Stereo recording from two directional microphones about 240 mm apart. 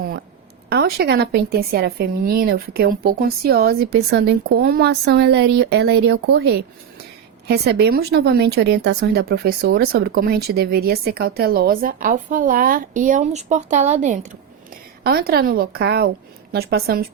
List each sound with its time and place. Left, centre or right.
0.7 s speech: right
15.0 s speech: right